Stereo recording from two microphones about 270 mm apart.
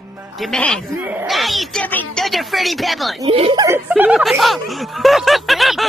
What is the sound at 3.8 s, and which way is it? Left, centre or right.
Speech, centre.